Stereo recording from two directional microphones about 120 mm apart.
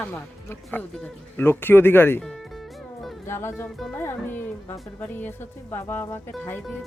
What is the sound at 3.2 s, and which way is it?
A woman's voice, 20° left (ahead or behind).